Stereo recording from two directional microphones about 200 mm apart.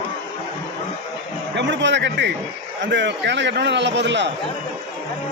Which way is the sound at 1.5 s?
60° right (ahead or behind).